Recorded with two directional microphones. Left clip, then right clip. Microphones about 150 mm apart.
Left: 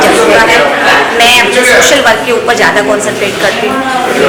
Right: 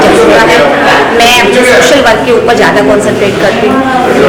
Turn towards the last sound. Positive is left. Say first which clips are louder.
# right 3 dB
turn(degrees=-20)  # may be behind; listen again after turning